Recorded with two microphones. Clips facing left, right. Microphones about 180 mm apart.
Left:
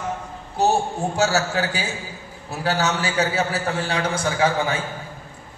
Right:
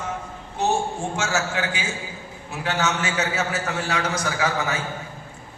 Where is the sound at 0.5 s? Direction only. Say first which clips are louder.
Left 3 dB; 35° left (ahead or behind).